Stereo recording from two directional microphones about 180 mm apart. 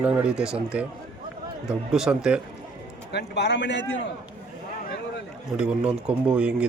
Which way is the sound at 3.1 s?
70° left (ahead or behind).